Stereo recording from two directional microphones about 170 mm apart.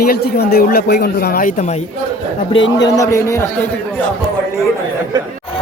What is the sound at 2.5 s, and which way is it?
Speech, 90° left.